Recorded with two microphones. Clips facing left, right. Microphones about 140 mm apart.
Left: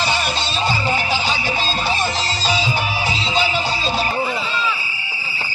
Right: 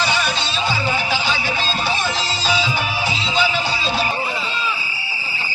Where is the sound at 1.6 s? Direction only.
40° left (ahead or behind).